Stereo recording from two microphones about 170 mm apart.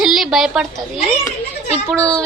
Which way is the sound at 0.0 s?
Centre (ahead or behind).